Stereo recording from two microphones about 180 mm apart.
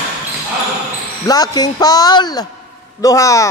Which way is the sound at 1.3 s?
20° left (ahead or behind).